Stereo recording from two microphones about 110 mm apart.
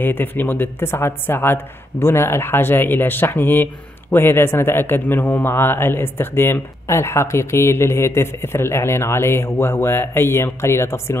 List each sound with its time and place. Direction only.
0.0 s speech: 15° left (ahead or behind)